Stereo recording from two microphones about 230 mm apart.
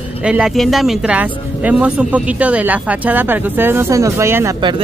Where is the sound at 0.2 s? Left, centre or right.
Centre.